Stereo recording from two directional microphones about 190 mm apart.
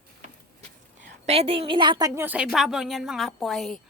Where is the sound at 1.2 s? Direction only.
30° right (ahead or behind).